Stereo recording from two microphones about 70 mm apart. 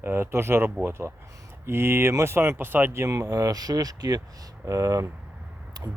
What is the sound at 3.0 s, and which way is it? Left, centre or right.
Speech, right.